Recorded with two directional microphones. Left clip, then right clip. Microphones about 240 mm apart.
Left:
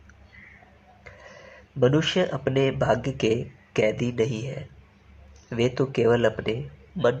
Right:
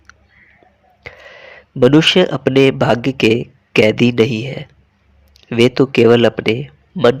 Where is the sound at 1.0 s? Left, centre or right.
Right.